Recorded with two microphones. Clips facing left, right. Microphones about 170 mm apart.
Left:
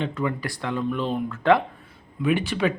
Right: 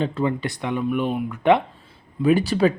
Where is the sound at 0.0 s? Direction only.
30° right (ahead or behind).